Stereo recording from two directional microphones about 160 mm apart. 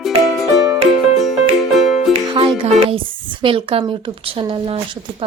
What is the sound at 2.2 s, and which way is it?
Music, 30° right (ahead or behind).